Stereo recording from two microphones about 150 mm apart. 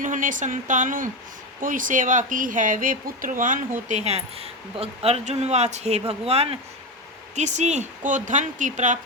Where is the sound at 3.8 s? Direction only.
50° right (ahead or behind).